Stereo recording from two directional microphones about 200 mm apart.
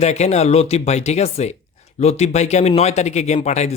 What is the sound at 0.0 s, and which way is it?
Speech, 35° left (ahead or behind).